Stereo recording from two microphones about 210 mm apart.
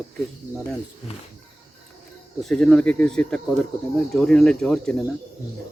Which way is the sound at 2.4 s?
5° left (ahead or behind).